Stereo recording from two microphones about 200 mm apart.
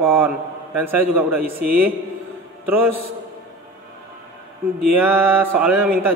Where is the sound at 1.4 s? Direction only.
50° right (ahead or behind).